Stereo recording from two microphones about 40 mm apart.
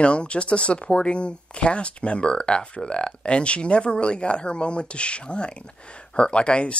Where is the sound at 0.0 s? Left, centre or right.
Left.